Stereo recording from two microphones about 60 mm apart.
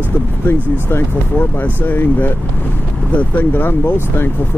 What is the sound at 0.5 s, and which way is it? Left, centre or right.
Speech, left.